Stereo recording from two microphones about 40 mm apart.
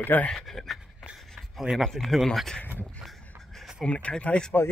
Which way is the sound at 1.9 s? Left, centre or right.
Centre.